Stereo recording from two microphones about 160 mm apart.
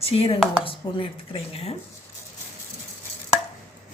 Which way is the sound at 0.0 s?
35° left (ahead or behind).